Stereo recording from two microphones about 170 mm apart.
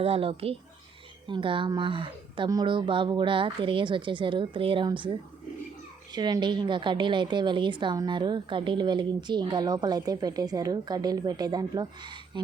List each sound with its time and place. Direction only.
0.0 s a woman's voice: 35° right (ahead or behind)
6.1 s a woman's voice: 25° right (ahead or behind)